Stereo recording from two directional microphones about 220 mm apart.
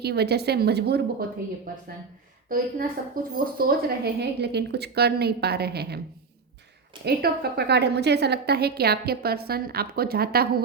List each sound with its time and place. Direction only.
0.0 s a woman's voice: 45° right (ahead or behind)
2.5 s a woman's voice: 40° right (ahead or behind)
7.0 s a woman's voice: 45° right (ahead or behind)